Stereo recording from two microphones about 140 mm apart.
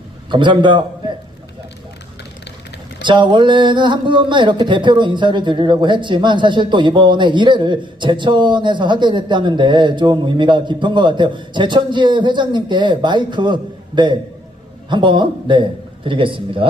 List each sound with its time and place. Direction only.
0.3 s speech: 35° right (ahead or behind)
3.0 s speech: 35° right (ahead or behind)